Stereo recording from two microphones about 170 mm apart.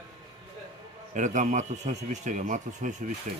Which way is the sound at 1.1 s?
45° right (ahead or behind).